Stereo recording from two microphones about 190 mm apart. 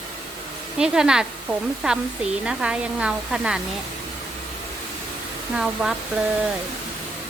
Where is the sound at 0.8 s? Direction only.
5° right (ahead or behind).